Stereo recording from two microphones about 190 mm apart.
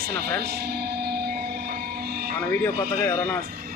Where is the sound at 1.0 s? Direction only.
55° right (ahead or behind).